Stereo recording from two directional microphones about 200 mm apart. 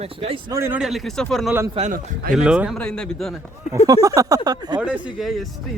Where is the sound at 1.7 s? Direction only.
40° right (ahead or behind).